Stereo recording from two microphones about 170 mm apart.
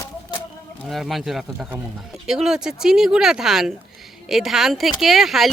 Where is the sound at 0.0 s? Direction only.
20° left (ahead or behind).